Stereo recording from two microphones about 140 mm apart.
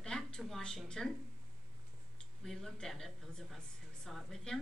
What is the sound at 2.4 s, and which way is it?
A woman's voice, 5° left (ahead or behind).